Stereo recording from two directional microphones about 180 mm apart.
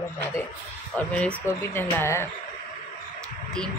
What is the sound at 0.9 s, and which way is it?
Speech, 10° left (ahead or behind).